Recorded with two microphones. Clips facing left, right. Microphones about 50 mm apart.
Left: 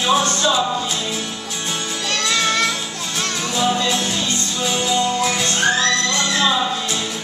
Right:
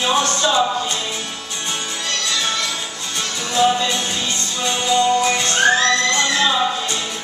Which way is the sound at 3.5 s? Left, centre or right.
Centre.